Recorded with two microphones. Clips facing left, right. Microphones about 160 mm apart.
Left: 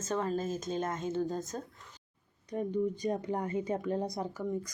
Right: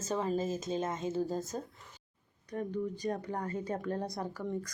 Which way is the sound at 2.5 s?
15° left (ahead or behind).